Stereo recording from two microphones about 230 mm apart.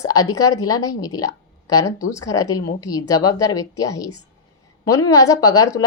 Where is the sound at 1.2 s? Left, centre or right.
Left.